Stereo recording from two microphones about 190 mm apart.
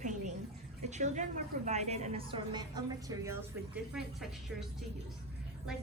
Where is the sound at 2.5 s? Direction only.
20° right (ahead or behind).